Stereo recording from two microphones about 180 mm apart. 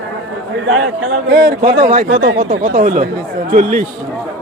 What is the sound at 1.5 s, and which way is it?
Speech, 50° right (ahead or behind).